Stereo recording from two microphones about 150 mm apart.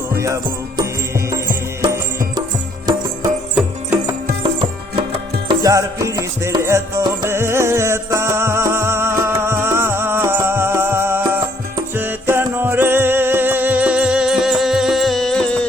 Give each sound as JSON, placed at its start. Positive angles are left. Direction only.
{"t": 1.8, "sound": "music", "side_deg": -25}
{"t": 3.5, "sound": "music", "side_deg": -10}
{"t": 4.4, "sound": "music", "side_deg": -35}
{"t": 5.6, "sound": "music", "side_deg": -20}